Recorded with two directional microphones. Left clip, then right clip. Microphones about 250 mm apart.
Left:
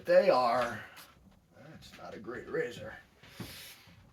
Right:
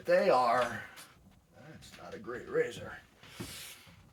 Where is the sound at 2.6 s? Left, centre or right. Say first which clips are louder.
Right 3 dB; centre.